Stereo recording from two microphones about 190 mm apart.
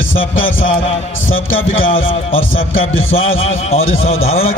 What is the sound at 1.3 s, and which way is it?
Speech, 90° left.